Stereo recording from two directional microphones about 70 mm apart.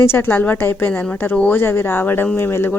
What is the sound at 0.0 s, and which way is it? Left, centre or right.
Speech, left.